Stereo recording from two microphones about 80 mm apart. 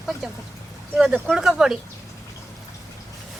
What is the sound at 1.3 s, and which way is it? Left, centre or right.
Speech, centre.